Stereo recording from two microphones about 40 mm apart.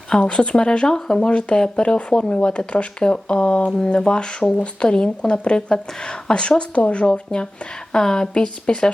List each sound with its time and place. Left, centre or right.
0.1 s a woman's voice: left
1.5 s speech: centre
1.8 s a woman's voice: left